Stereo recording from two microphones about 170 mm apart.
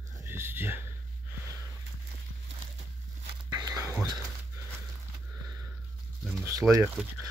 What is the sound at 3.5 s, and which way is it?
Whispering, 20° right (ahead or behind).